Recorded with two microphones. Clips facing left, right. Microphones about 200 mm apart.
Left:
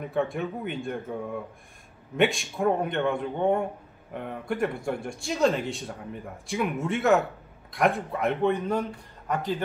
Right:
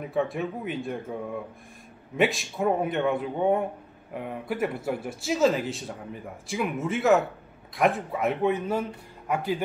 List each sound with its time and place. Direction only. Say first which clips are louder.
0.0 s a man's voice: even; centre (ahead or behind)